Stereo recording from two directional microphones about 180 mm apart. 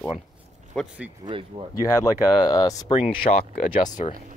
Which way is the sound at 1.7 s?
20° left (ahead or behind).